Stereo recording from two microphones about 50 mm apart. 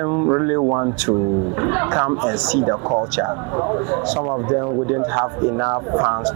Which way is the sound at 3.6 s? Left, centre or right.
Right.